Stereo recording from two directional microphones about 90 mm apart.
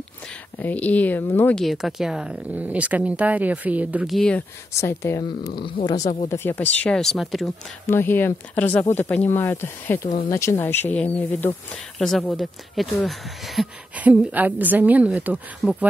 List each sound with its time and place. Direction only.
0.6 s speech: 20° left (ahead or behind)
1.5 s speech: centre (ahead or behind); by 4.1 s 15° right (ahead or behind)
4.2 s speech: 10° left (ahead or behind)
4.7 s speech: 30° left (ahead or behind)
5.7 s speech: 50° left (ahead or behind)
6.2 s speech: 25° left (ahead or behind)
7.0 s speech: centre (ahead or behind)
7.8 s speech: 25° left (ahead or behind); by 13.7 s centre (ahead or behind)
13.9 s speech: 15° right (ahead or behind)